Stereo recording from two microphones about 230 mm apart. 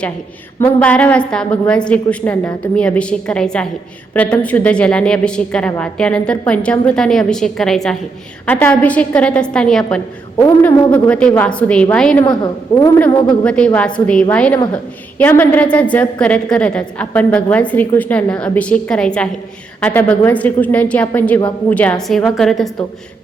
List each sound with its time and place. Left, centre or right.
0.6 s a woman's voice: centre
10.3 s a woman's voice: centre
10.9 s a woman's voice: centre
12.2 s a woman's voice: centre
13.4 s a woman's voice: centre